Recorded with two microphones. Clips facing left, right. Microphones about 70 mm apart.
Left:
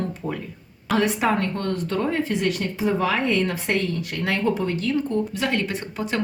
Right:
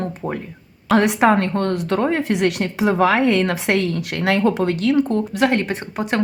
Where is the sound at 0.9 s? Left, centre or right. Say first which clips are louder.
Right 6 dB; right.